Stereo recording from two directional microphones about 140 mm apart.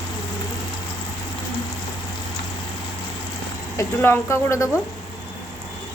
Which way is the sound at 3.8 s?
15° left (ahead or behind).